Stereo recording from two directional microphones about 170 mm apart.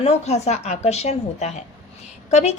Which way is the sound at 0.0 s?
40° left (ahead or behind).